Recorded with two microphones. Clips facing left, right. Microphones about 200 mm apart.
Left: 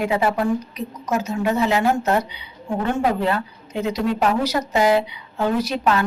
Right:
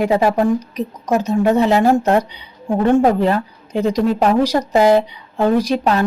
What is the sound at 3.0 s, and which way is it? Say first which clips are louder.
A woman's voice: right 6 dB; 40° right (ahead or behind).